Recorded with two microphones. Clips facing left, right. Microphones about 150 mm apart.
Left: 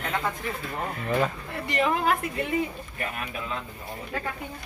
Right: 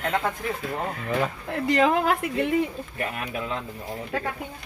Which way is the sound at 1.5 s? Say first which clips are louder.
Right 5 dB; 90° right.